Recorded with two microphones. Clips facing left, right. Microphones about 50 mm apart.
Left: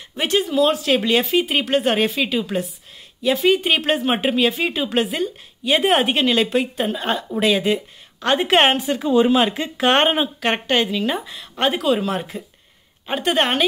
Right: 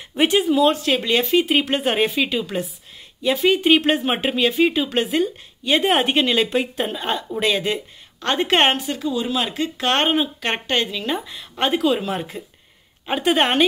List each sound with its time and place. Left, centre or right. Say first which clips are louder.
0.1 s speech: right 3 dB; centre
8.7 s speech: left 3 dB; centre
9.1 s speech: left 11 dB; left
9.4 s speech: left 4 dB; centre